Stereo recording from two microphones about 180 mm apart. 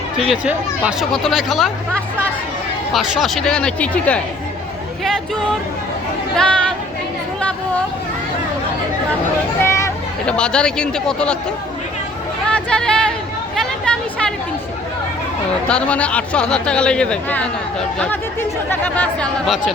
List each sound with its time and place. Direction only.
0.3 s speech: 5° right (ahead or behind)
2.9 s speech: centre (ahead or behind)
6.3 s chatter: 5° left (ahead or behind)
9.6 s a sound: 15° left (ahead or behind)
10.2 s speech: 5° left (ahead or behind)
12.5 s a sound: 5° left (ahead or behind)
15.6 s speech: 5° left (ahead or behind)